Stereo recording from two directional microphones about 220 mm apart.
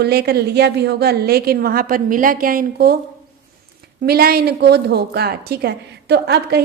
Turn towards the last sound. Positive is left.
turn(degrees=-50)  # may be behind; listen again after turning